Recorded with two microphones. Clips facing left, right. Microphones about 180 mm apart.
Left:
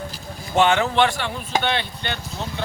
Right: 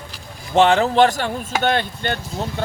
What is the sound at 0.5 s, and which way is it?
Speech, 30° right (ahead or behind).